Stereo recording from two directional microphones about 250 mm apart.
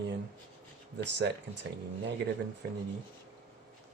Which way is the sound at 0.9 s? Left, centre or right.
Right.